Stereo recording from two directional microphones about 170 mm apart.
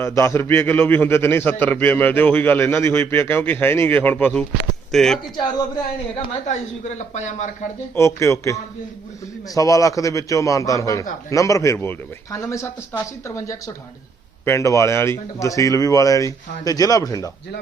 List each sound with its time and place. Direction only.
0.0 s a man's voice: 15° left (ahead or behind)
6.5 s speech: 45° left (ahead or behind)
7.9 s a man's voice: 15° left (ahead or behind)